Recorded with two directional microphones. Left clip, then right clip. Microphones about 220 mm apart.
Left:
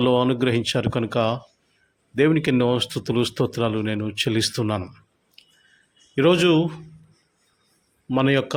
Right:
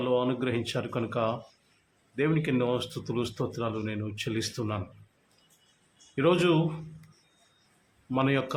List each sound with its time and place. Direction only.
0.0 s speech: 40° left (ahead or behind)
6.1 s speech: 35° left (ahead or behind)
8.1 s speech: 30° left (ahead or behind)